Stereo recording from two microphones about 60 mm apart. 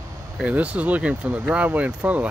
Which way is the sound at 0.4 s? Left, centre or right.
Right.